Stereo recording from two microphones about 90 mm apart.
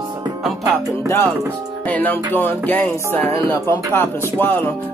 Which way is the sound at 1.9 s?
20° left (ahead or behind).